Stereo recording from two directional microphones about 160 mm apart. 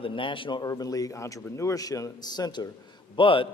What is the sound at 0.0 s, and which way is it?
A man's voice, 30° left (ahead or behind).